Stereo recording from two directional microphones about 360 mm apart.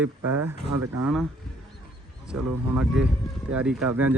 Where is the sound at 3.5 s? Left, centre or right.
Centre.